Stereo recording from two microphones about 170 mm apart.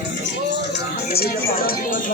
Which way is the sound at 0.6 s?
70° left (ahead or behind).